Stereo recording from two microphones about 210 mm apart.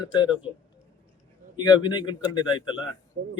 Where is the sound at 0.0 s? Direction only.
15° left (ahead or behind).